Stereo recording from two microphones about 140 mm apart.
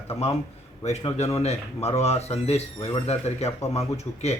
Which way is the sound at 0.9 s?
50° left (ahead or behind).